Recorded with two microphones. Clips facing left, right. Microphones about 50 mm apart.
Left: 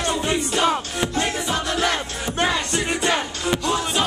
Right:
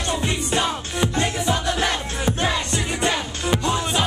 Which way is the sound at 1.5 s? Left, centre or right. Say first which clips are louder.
Even; right.